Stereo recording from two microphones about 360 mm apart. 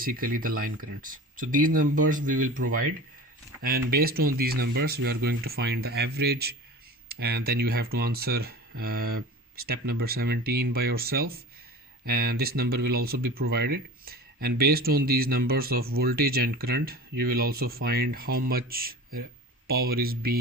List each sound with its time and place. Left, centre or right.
0.0 s speech: right
3.9 s speech: right